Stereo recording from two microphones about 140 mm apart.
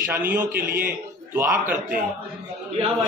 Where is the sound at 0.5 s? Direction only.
90° right.